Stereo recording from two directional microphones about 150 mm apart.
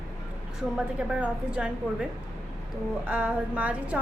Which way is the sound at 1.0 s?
5° right (ahead or behind).